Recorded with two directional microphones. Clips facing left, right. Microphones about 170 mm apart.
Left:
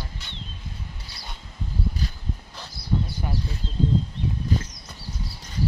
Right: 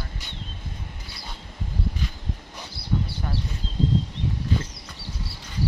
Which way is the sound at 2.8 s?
30° right (ahead or behind).